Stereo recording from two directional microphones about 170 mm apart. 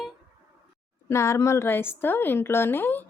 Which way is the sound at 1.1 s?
15° left (ahead or behind).